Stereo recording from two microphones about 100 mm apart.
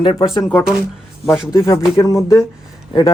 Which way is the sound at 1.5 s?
30° left (ahead or behind).